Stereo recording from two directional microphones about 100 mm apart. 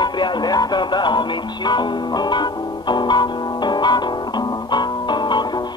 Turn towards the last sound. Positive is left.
turn(degrees=50)  # may be behind; listen again after turning